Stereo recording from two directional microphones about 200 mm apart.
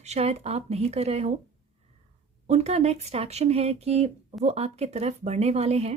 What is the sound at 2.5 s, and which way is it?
Speech, 30° right (ahead or behind).